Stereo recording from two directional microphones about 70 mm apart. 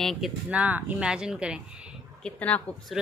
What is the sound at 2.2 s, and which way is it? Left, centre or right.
Speech, centre.